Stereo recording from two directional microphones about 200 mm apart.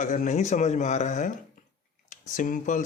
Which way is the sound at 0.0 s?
40° left (ahead or behind).